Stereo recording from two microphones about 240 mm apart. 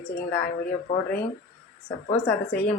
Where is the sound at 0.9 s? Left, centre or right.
Left.